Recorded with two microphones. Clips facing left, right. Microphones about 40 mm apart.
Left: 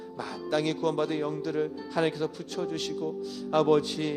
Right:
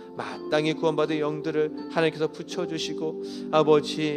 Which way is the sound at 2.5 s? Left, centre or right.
Right.